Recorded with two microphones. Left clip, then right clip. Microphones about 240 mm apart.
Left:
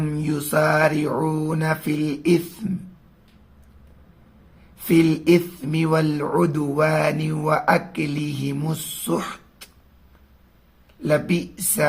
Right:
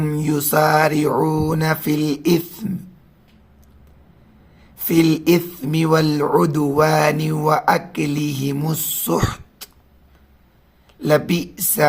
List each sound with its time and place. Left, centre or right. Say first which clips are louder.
0.0 s speech: right 5 dB; right
4.8 s speech: right 2 dB; right
11.0 s speech: right 4 dB; right